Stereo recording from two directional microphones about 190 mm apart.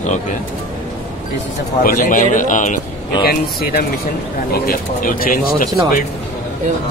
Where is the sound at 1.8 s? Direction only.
45° left (ahead or behind).